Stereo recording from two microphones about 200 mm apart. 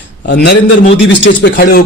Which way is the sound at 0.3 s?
60° left (ahead or behind).